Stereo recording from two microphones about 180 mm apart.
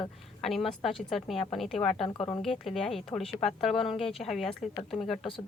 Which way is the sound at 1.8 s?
35° left (ahead or behind).